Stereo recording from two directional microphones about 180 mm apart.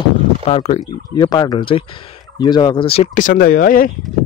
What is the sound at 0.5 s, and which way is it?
Speech, 35° left (ahead or behind).